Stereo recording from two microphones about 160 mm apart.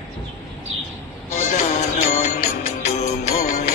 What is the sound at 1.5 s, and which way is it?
Music, 50° left (ahead or behind).